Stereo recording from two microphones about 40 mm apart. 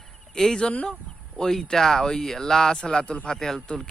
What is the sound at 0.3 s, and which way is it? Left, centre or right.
Speech, centre.